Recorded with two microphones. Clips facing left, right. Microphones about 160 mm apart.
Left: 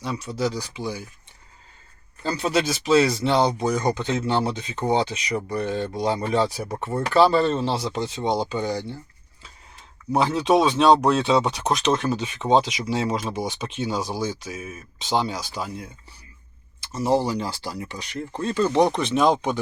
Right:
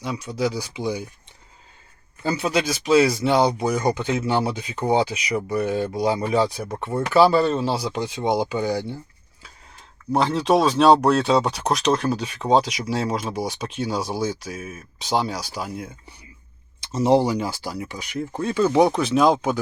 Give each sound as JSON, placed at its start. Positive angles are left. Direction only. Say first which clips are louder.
{"t": 0.0, "sound": "speech", "louder": "right 1 dB", "side_deg": 0}
{"t": 0.6, "sound": "speech", "louder": "right 4 dB", "side_deg": -15}
{"t": 2.2, "sound": "speech", "louder": "right 1 dB", "side_deg": -5}
{"t": 10.1, "sound": "speech", "louder": "even", "side_deg": 0}
{"t": 16.8, "sound": "speech", "louder": "right 4 dB", "side_deg": -20}